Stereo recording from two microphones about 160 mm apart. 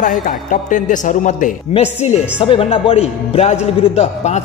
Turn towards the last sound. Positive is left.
turn(degrees=45)  # may be behind; listen again after turning